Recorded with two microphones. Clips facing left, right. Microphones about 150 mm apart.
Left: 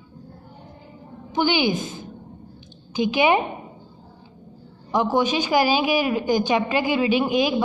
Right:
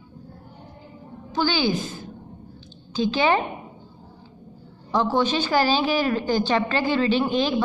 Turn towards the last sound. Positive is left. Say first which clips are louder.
# left 1 dB
turn(degrees=10)  # may be behind; listen again after turning